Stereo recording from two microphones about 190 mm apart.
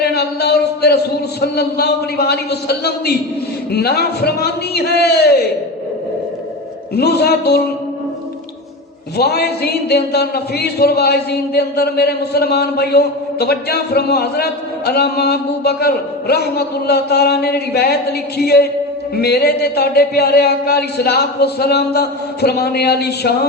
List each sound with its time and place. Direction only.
0.0 s speech: 60° left (ahead or behind)
6.9 s speech: 55° left (ahead or behind)
9.1 s speech: 60° left (ahead or behind)